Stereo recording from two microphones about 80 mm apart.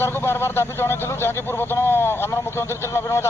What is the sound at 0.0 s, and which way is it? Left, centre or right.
Speech, left.